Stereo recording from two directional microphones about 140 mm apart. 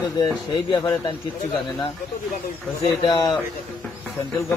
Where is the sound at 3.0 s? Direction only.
30° left (ahead or behind).